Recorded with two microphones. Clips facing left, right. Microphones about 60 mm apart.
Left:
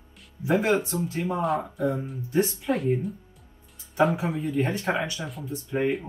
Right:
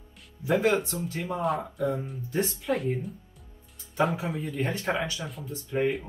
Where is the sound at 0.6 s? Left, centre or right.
Left.